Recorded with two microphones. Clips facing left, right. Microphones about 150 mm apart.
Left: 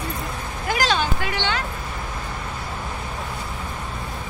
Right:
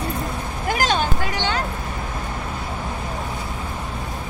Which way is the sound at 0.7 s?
45° right (ahead or behind).